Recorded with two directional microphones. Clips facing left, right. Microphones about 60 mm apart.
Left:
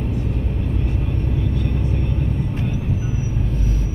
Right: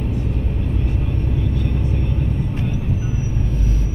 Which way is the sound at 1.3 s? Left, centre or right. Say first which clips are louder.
Even; left.